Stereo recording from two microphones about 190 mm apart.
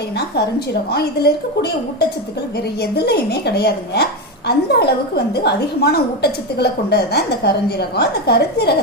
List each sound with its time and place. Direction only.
0.2 s a woman's voice: 60° left (ahead or behind)